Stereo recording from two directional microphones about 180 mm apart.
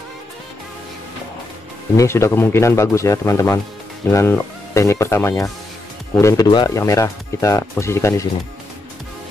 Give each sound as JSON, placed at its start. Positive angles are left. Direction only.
{"t": 2.0, "sound": "speech", "side_deg": 15}